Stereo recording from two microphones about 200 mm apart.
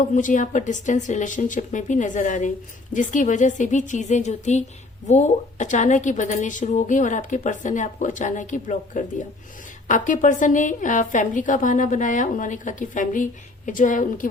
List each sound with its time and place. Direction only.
0.0 s a woman's voice: 40° left (ahead or behind)